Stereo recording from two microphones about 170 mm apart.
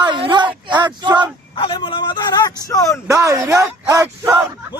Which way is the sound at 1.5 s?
30° left (ahead or behind).